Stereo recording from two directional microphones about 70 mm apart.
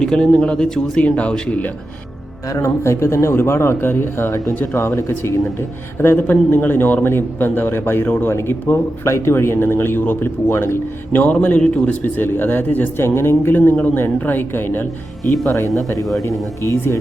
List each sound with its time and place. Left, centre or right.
0.0 s speech: centre
2.5 s speech: left
11.1 s speech: left